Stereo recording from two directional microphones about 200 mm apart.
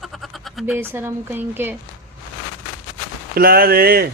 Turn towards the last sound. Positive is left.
turn(degrees=-50)  # may be behind; listen again after turning